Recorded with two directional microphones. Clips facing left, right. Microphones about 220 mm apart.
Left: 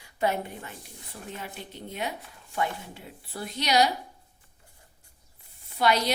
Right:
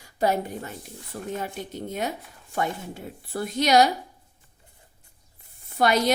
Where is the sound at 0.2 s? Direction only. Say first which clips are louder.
Right 4 dB; 40° right (ahead or behind).